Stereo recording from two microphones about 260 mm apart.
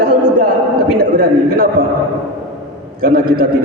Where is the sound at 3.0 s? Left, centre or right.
Right.